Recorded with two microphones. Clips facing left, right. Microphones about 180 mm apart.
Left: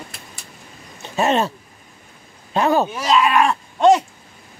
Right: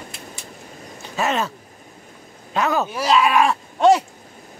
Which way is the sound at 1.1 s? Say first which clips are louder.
Left 4 dB; 30° left (ahead or behind).